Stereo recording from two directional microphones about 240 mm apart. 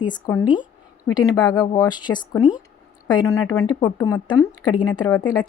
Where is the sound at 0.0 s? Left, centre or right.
Centre.